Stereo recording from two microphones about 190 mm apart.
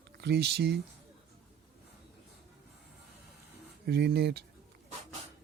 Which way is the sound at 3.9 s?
60° right (ahead or behind).